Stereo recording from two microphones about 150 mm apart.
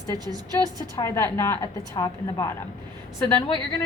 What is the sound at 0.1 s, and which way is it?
Speech, 25° right (ahead or behind).